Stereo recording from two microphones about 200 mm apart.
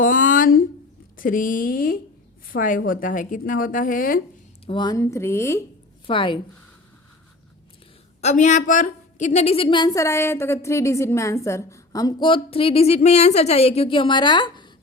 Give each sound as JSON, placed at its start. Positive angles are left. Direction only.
{"t": 0.0, "sound": "a sound", "side_deg": 40}
{"t": 1.1, "sound": "a woman's voice", "side_deg": 45}
{"t": 4.6, "sound": "speech", "side_deg": 25}
{"t": 6.1, "sound": "a woman's voice", "side_deg": 25}
{"t": 8.2, "sound": "a woman's voice", "side_deg": 35}